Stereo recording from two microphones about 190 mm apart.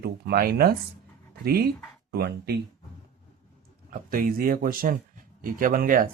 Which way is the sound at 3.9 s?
45° right (ahead or behind).